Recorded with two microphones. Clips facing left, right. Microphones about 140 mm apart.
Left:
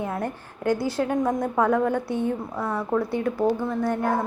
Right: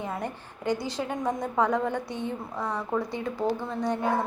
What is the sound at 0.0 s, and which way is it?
A woman's voice, 5° left (ahead or behind).